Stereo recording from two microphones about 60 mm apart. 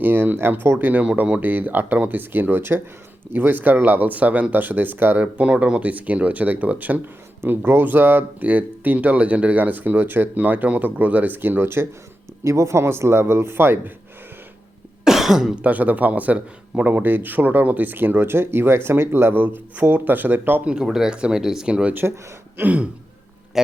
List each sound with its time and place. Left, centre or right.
0.0 s a man's voice: right
5.2 s speech: right
7.4 s speech: right
12.5 s a man's voice: right
15.0 s cough: centre
15.5 s a man's voice: right
20.8 s speech: centre; by 22.9 s right